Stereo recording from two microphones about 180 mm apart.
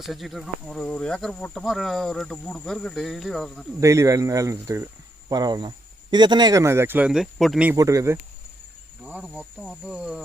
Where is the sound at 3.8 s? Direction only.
15° right (ahead or behind).